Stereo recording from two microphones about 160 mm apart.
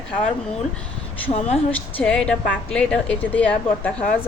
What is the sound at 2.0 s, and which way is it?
A woman's voice, 5° left (ahead or behind).